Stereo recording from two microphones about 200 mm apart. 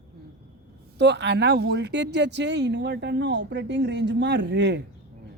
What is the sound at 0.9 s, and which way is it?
Speech, 60° right (ahead or behind).